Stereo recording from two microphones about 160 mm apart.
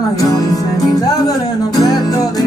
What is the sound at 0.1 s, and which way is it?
Music, 25° left (ahead or behind).